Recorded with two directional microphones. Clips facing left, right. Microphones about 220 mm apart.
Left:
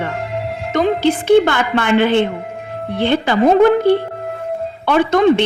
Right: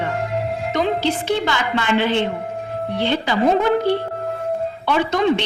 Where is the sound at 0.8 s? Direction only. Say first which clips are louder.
Left 6 dB; 55° left (ahead or behind).